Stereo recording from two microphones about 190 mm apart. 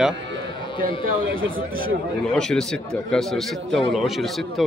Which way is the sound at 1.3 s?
50° right (ahead or behind).